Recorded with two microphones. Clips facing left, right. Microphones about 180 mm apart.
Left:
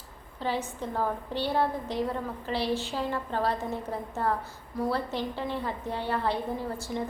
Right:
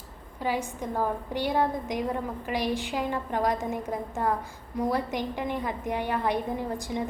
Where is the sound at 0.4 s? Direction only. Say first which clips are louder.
Right 2 dB; 10° right (ahead or behind).